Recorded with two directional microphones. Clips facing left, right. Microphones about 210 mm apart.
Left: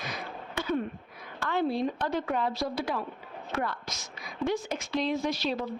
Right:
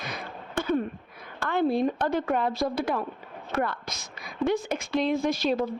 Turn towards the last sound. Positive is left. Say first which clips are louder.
# right 5 dB
turn(degrees=-50)  # may be behind; listen again after turning